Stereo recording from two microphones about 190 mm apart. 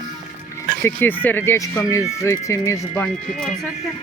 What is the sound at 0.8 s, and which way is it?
Speech, 10° left (ahead or behind).